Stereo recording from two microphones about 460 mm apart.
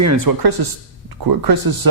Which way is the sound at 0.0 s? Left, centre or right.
Right.